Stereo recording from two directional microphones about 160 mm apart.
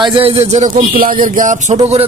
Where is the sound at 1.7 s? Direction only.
35° right (ahead or behind).